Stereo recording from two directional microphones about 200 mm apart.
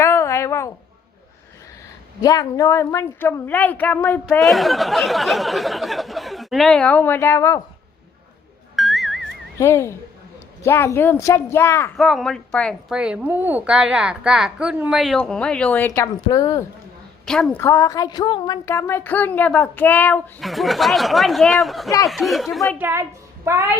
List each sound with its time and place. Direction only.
0.0 s a sound: 15° left (ahead or behind)
2.2 s a woman's voice: 20° left (ahead or behind)
8.7 s music: centre (ahead or behind)
9.6 s a woman's voice: 15° left (ahead or behind)
11.9 s a woman's voice: centre (ahead or behind); by 16.6 s 15° left (ahead or behind)
17.2 s a woman's voice: centre (ahead or behind)
17.6 s a woman's voice: 15° left (ahead or behind); by 21.8 s centre (ahead or behind)
21.8 s a woman's voice: 15° left (ahead or behind)
22.1 s a woman's voice: centre (ahead or behind)
22.8 s a woman's voice: 10° right (ahead or behind)